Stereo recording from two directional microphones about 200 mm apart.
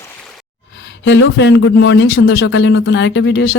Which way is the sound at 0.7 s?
70° left (ahead or behind).